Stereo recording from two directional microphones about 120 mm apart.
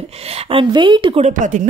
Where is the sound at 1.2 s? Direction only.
90° right.